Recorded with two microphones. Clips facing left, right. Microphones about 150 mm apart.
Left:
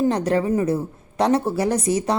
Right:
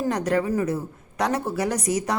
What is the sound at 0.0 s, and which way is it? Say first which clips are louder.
A woman's voice: left 3 dB; 30° left (ahead or behind).